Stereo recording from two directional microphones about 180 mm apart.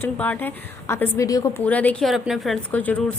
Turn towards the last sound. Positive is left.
turn(degrees=10)  # may be behind; listen again after turning